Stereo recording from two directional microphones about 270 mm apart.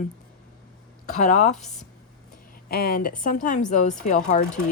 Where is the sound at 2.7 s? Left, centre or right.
Left.